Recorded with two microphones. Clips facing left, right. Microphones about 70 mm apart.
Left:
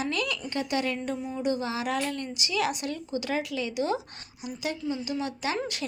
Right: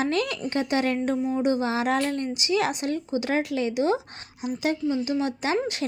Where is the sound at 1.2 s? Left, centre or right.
Right.